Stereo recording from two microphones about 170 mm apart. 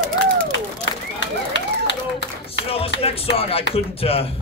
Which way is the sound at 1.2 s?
90° left.